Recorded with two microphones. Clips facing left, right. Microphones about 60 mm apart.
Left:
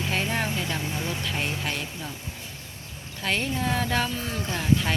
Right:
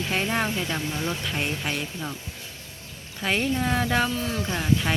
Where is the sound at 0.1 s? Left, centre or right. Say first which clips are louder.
Right 2 dB; centre.